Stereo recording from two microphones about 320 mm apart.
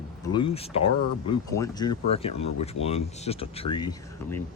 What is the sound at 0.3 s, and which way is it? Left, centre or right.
Speech, centre.